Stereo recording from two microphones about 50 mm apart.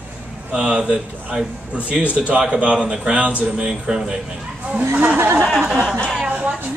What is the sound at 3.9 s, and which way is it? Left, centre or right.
Speech, centre.